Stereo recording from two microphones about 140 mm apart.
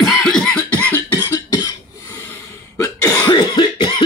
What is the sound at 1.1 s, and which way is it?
Cough, 25° left (ahead or behind).